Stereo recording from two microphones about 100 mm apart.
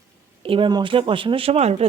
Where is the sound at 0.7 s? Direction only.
50° right (ahead or behind); by 1.9 s 90° right.